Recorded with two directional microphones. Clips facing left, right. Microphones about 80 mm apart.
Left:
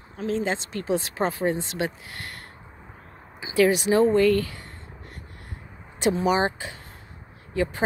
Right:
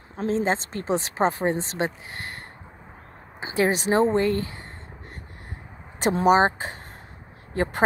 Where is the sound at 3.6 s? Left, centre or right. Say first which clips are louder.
Left 2 dB; right.